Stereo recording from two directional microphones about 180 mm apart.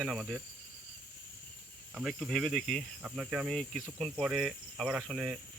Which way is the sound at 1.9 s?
Centre (ahead or behind).